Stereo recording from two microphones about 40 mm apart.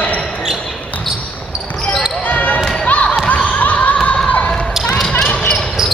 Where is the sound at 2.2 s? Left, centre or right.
Left.